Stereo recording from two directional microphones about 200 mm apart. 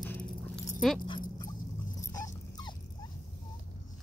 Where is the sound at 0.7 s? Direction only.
5° left (ahead or behind).